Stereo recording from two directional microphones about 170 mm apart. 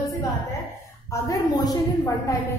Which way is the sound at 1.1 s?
20° left (ahead or behind).